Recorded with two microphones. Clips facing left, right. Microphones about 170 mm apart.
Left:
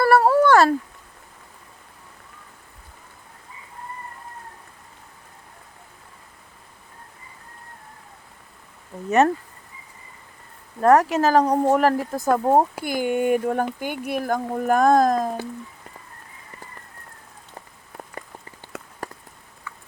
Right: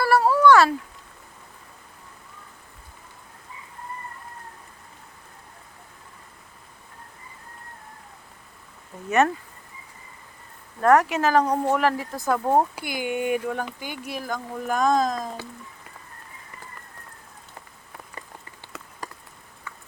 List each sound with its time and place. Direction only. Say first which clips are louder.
0.0 s a sound: left 2 dB; 55° left (ahead or behind)
9.0 s speech: left 3 dB; 35° left (ahead or behind)
10.8 s speech: left 2 dB; 30° left (ahead or behind)
12.4 s speech: left 2 dB; 20° left (ahead or behind)
12.7 s speech: left 5 dB; 45° left (ahead or behind)
18.7 s rain on surface: left 5 dB; 55° left (ahead or behind)